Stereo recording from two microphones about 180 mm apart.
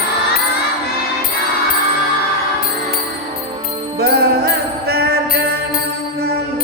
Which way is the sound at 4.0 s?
60° right (ahead or behind).